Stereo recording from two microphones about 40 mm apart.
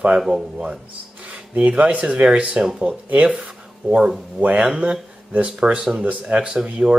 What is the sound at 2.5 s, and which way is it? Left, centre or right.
Speech, centre.